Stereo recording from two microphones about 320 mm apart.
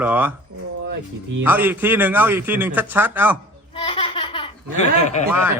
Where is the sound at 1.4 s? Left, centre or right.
Centre.